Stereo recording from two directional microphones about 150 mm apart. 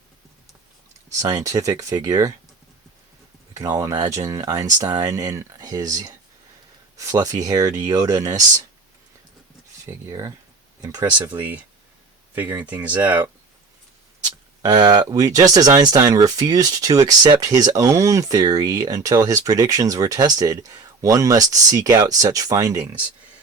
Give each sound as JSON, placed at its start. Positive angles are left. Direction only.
{"t": 1.2, "sound": "speech", "side_deg": -25}
{"t": 3.5, "sound": "speech", "side_deg": -25}
{"t": 9.8, "sound": "speech", "side_deg": -25}
{"t": 11.3, "sound": "speech", "side_deg": -10}
{"t": 14.3, "sound": "a sound", "side_deg": -30}
{"t": 15.1, "sound": "speech", "side_deg": -25}